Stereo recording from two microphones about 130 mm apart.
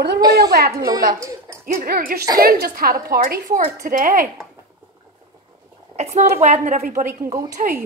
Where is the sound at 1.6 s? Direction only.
90° right.